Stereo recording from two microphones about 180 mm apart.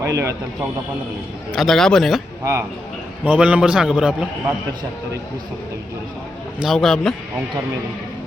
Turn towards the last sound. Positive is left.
turn(degrees=5)  # may be behind; listen again after turning